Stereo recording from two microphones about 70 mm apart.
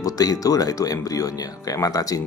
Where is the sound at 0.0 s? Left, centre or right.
Left.